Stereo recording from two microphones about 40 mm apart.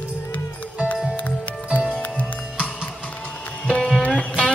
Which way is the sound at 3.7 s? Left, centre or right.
Left.